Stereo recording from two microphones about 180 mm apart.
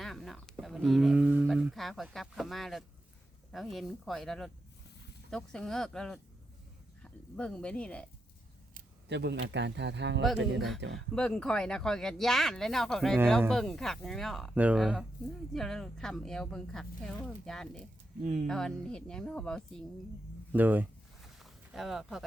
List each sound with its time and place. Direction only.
0.0 s speech: centre (ahead or behind)
9.0 s speech: 70° right (ahead or behind)
10.8 s speech: 85° right
11.1 s speech: 5° left (ahead or behind)
18.2 s speech: 45° right (ahead or behind)
18.4 s speech: 5° left (ahead or behind)
20.5 s speech: 10° right (ahead or behind)
21.3 s a sound: centre (ahead or behind)